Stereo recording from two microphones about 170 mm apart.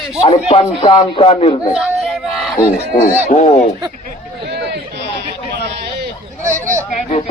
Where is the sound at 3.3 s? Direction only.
40° left (ahead or behind).